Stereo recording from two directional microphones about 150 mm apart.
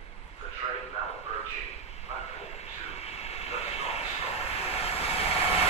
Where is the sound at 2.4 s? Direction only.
45° left (ahead or behind).